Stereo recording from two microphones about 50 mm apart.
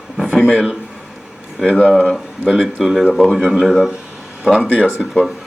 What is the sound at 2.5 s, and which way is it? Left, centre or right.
Speech, centre.